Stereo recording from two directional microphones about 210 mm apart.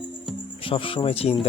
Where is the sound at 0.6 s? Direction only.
25° left (ahead or behind).